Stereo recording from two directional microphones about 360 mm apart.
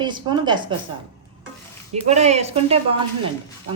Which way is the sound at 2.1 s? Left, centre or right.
Centre.